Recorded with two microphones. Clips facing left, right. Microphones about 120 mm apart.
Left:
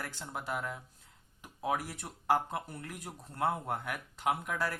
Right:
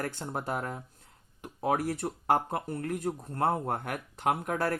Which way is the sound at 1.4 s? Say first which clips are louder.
Right 6 dB; 55° right (ahead or behind).